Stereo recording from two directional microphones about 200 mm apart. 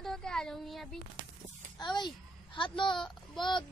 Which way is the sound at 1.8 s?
20° left (ahead or behind).